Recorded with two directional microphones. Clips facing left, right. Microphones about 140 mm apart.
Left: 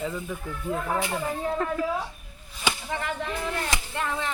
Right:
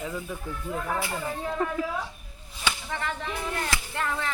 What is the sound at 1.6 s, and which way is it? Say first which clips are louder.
Speech: right 3 dB; 15° right (ahead or behind).